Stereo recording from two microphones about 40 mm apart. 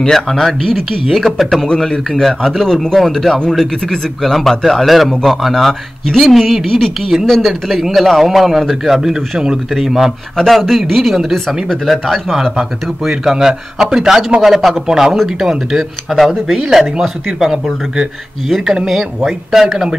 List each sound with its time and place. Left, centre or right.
0.1 s a man's voice: centre
10.3 s a man's voice: centre
11.3 s a man's voice: centre
12.5 s a man's voice: centre
16.5 s speech: centre
17.0 s a man's voice: centre
18.9 s a man's voice: centre